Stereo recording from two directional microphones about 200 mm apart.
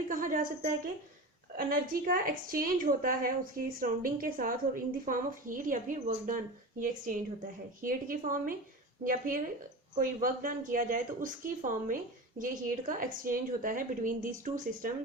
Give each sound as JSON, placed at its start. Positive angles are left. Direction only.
{"t": 0.1, "sound": "a woman's voice", "side_deg": -40}